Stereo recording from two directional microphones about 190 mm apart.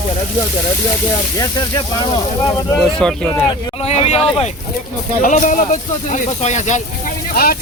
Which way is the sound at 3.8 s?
35° left (ahead or behind).